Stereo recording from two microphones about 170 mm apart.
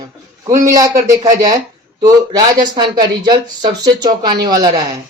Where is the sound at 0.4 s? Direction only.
20° right (ahead or behind).